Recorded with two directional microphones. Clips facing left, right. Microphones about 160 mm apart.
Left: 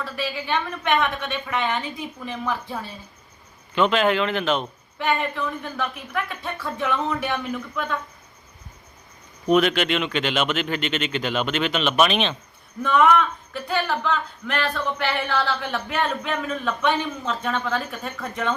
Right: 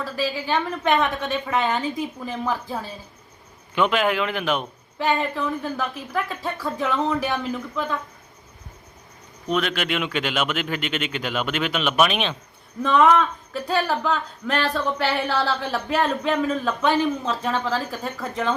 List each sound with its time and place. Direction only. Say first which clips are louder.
0.0 s speech: right 3 dB; 35° right (ahead or behind)
3.8 s speech: left 1 dB; 10° right (ahead or behind)
4.9 s speech: right 1 dB; 35° right (ahead or behind)
9.5 s speech: left 6 dB; 5° left (ahead or behind)
9.7 s speech: left 2 dB; 5° right (ahead or behind)
12.8 s speech: right 1 dB; 30° right (ahead or behind)